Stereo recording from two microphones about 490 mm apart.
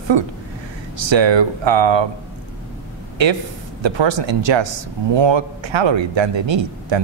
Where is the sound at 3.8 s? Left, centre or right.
Right.